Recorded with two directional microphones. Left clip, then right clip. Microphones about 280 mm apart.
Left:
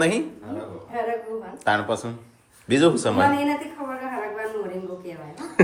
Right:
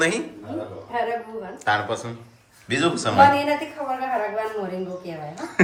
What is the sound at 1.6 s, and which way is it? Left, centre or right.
Speech, centre.